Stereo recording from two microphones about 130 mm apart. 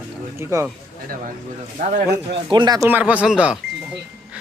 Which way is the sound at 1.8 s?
90° right.